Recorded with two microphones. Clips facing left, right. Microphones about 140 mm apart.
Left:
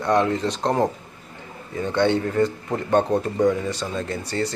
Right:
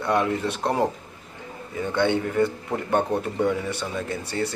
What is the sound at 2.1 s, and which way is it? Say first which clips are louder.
Speech: left 2 dB; 10° right (ahead or behind).